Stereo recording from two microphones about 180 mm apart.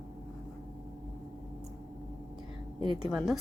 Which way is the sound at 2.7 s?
25° right (ahead or behind).